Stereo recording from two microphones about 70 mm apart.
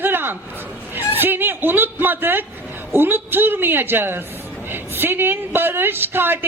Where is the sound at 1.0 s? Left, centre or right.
Right.